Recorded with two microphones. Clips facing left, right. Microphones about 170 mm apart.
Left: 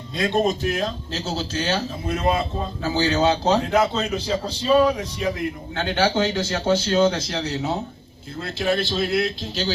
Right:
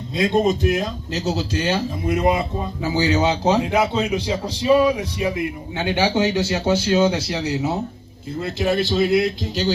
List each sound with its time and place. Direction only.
0.7 s speech: 15° right (ahead or behind)